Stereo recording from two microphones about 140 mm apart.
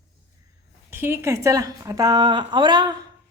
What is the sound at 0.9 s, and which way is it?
A woman's voice, 15° right (ahead or behind).